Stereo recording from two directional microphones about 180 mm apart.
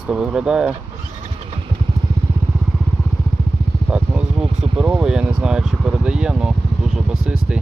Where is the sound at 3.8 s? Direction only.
5° right (ahead or behind).